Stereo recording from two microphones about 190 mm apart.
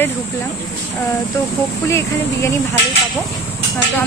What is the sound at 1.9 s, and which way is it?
Speech, 15° left (ahead or behind).